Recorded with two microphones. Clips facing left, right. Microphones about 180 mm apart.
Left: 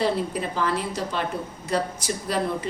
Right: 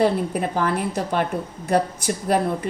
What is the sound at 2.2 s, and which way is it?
Speech, 55° right (ahead or behind).